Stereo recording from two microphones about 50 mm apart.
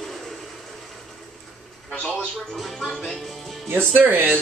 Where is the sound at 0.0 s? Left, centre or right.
Centre.